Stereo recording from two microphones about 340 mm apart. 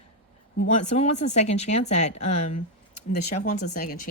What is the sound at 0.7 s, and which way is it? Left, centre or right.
Speech, centre.